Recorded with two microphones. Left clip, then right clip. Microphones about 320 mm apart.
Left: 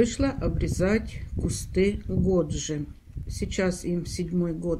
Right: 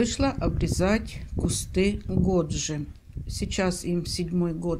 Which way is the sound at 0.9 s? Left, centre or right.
Right.